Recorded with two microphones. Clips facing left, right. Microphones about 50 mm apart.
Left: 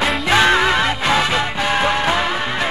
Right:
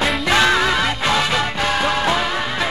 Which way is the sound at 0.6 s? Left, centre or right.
Centre.